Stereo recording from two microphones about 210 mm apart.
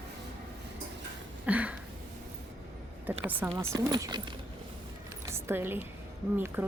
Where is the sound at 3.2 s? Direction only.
10° right (ahead or behind).